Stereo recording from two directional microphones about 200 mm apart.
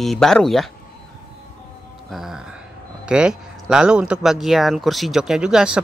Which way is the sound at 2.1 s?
Centre (ahead or behind).